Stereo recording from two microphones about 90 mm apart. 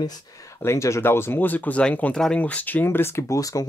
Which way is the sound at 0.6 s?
30° left (ahead or behind).